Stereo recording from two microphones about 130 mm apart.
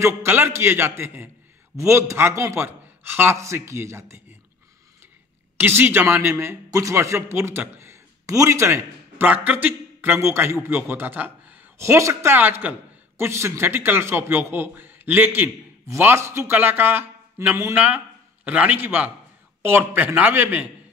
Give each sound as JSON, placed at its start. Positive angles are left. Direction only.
{"t": 0.0, "sound": "a man's voice", "side_deg": -20}
{"t": 5.6, "sound": "a man's voice", "side_deg": -15}